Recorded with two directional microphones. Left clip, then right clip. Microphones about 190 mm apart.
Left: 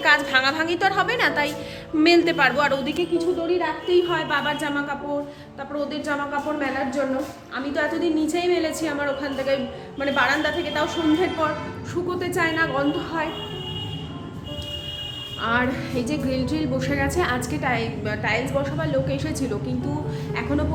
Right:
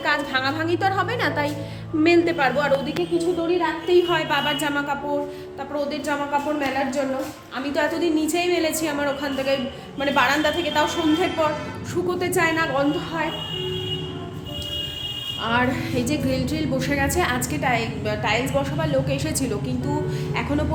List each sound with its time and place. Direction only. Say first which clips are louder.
0.0 s a woman's voice: left 4 dB; centre (ahead or behind); by 4.9 s 15° right (ahead or behind)
7.7 s a woman's voice: right 2 dB; 15° right (ahead or behind)
15.4 s a woman's voice: even; 5° right (ahead or behind)